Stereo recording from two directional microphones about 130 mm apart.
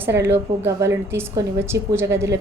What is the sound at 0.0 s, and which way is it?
A woman's voice, 15° right (ahead or behind).